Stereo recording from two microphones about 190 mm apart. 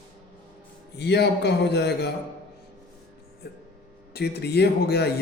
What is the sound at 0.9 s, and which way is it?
A man's voice, 60° left (ahead or behind).